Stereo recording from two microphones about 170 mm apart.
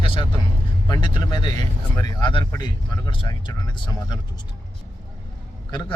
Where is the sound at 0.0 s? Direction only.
30° left (ahead or behind).